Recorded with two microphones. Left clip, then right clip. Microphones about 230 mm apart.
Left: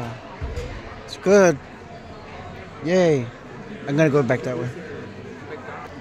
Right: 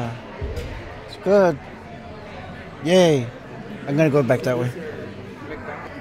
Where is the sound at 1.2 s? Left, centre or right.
Left.